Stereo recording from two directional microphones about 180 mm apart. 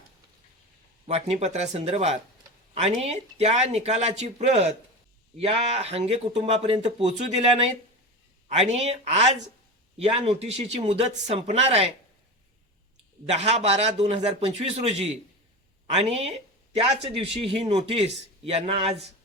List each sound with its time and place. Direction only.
1.0 s speech: 35° right (ahead or behind)
8.5 s speech: 35° right (ahead or behind)
13.3 s speech: 35° right (ahead or behind)